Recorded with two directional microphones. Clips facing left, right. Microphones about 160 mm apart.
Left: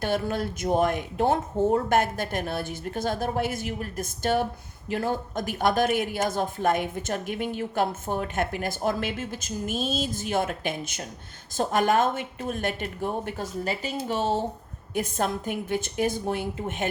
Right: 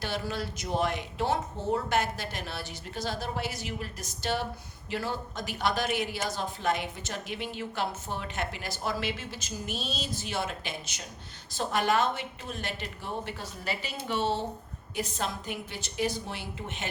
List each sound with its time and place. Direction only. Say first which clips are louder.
0.0 s speech: left 7 dB; 50° left (ahead or behind)